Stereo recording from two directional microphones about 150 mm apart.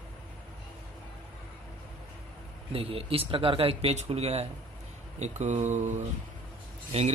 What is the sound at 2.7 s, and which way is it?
Speech, 40° right (ahead or behind).